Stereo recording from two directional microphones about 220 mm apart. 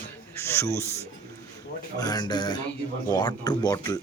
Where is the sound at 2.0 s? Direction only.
15° left (ahead or behind).